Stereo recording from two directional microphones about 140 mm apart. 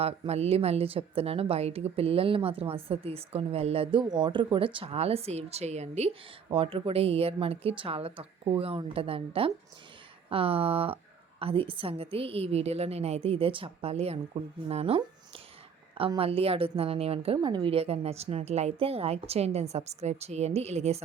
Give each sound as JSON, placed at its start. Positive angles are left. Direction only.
{"t": 0.0, "sound": "a woman's voice", "side_deg": -45}
{"t": 4.0, "sound": "a woman's voice", "side_deg": -30}
{"t": 6.5, "sound": "a woman's voice", "side_deg": -40}
{"t": 17.3, "sound": "a woman's voice", "side_deg": -30}